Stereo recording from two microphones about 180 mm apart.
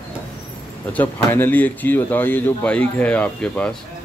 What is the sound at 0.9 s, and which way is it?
A man's voice, 10° left (ahead or behind).